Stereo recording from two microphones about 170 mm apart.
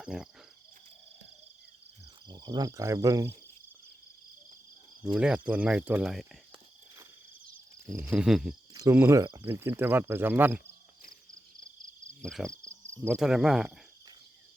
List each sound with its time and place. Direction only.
0.0 s speech: 5° right (ahead or behind)
2.2 s speech: 25° right (ahead or behind)
5.1 s speech: 5° right (ahead or behind)
7.9 s speech: 15° right (ahead or behind)
8.7 s speech: 20° right (ahead or behind)
11.6 s a sound: 50° right (ahead or behind)
12.2 s speech: 5° left (ahead or behind)